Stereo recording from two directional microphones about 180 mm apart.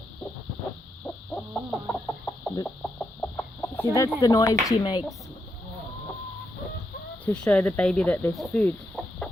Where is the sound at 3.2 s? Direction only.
10° left (ahead or behind).